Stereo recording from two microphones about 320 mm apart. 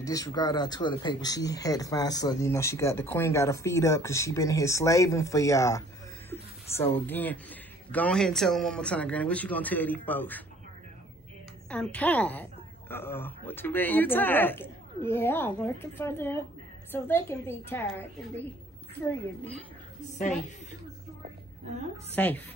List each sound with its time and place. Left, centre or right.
0.0 s speech: centre
11.7 s speech: centre
20.0 s a woman's voice: left
22.1 s speech: centre